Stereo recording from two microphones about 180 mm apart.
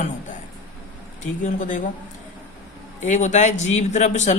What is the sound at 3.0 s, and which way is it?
Speech, 40° left (ahead or behind).